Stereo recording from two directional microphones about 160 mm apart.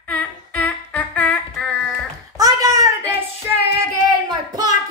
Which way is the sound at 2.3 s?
20° right (ahead or behind).